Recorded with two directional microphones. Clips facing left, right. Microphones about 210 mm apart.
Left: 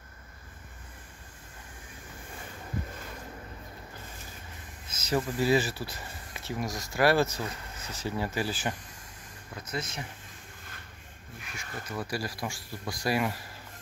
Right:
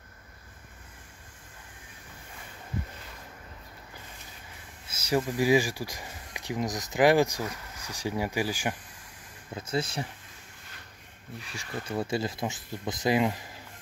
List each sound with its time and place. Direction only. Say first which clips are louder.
4.8 s speech: right 2 dB; 10° right (ahead or behind)
9.5 s speech: right 6 dB; 25° right (ahead or behind)
11.4 s speech: right 4 dB; 30° right (ahead or behind)